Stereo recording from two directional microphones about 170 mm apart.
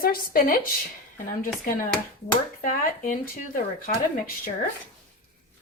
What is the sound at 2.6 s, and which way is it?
Speech, 55° left (ahead or behind).